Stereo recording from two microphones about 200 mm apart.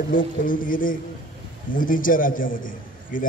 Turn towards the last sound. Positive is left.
turn(degrees=40)  # may be behind; listen again after turning